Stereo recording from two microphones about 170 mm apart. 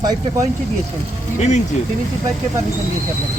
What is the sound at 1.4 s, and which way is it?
Speech, 40° left (ahead or behind).